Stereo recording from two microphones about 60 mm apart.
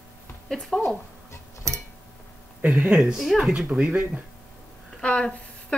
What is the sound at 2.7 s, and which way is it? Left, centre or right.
Speech, centre.